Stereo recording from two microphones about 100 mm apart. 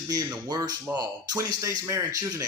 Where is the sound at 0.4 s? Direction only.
40° right (ahead or behind).